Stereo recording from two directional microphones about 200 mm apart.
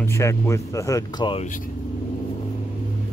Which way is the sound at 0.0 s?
15° left (ahead or behind).